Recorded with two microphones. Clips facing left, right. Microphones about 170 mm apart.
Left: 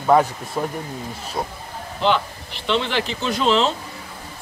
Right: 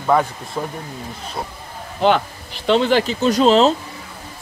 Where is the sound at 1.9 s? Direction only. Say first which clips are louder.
Right 4 dB; 50° right (ahead or behind).